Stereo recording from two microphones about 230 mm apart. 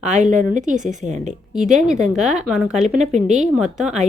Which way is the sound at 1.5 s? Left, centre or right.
Centre.